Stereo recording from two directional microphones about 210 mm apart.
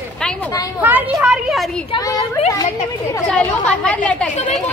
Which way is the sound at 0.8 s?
10° right (ahead or behind).